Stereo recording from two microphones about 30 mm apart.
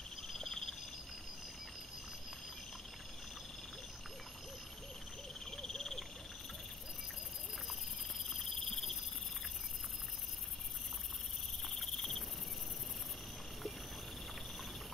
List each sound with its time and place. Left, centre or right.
0.3 s a sound: centre
5.4 s frog: centre
8.3 s cricket: centre
11.7 s cricket: centre